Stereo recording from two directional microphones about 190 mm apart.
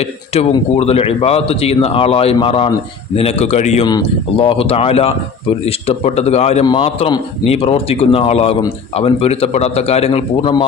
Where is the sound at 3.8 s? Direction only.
25° left (ahead or behind).